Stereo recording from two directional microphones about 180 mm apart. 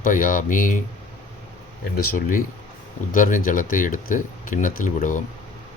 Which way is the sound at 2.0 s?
50° left (ahead or behind).